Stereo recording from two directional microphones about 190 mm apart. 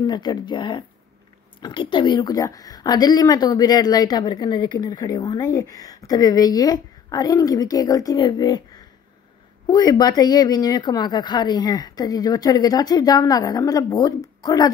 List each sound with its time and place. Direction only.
0.0 s speech: 20° left (ahead or behind)